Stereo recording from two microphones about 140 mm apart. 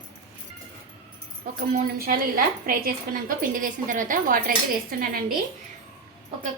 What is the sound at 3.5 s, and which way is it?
A woman's voice, 70° right (ahead or behind).